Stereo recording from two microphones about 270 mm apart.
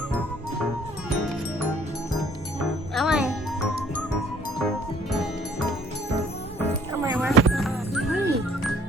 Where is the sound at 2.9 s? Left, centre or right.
Centre.